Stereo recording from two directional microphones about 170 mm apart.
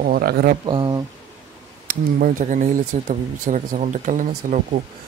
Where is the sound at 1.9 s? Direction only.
60° right (ahead or behind).